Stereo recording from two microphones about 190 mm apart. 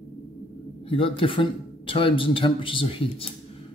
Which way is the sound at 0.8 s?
30° left (ahead or behind).